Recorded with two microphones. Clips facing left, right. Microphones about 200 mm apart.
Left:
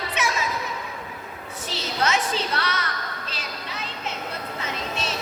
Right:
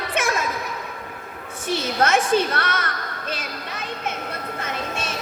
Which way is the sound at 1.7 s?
50° right (ahead or behind).